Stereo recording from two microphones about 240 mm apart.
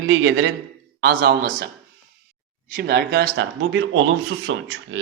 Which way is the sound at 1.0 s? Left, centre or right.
Right.